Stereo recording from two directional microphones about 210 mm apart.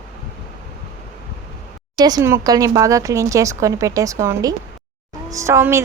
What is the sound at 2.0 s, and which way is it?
Speech, 20° right (ahead or behind).